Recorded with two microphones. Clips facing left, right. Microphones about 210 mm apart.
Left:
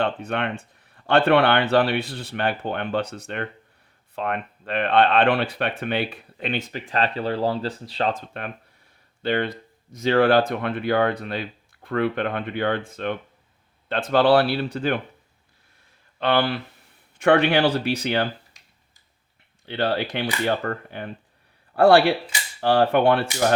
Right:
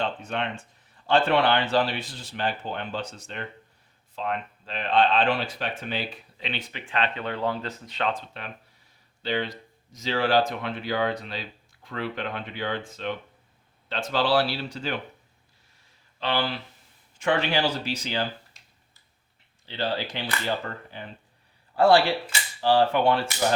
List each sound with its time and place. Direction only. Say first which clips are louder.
0.0 s speech: left 5 dB; 60° left (ahead or behind); by 8.2 s 35° left (ahead or behind)
9.2 s speech: left 5 dB; 55° left (ahead or behind)
16.2 s speech: left 6 dB; 60° left (ahead or behind)
19.6 s speech: left 5 dB; 60° left (ahead or behind)